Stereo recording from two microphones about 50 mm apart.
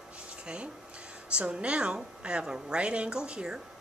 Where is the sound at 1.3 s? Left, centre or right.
Right.